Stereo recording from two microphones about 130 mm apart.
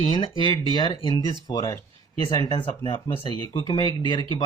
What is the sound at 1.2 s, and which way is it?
Speech, 25° left (ahead or behind).